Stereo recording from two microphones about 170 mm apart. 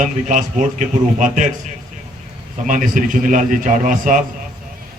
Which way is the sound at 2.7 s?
50° right (ahead or behind).